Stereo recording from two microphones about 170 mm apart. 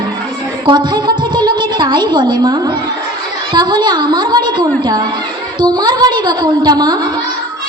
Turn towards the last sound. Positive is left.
turn(degrees=-25)  # may be behind; listen again after turning